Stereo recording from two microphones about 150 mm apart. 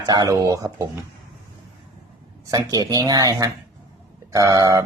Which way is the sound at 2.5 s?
25° right (ahead or behind).